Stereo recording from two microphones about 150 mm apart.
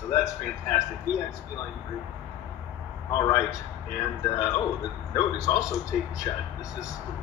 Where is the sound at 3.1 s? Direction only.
20° left (ahead or behind).